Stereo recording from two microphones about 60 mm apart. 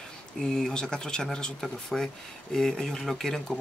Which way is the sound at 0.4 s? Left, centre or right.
Centre.